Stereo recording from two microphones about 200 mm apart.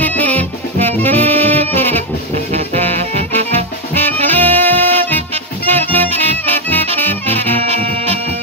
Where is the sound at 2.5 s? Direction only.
30° right (ahead or behind).